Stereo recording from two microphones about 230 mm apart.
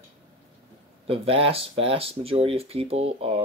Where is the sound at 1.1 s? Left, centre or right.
Right.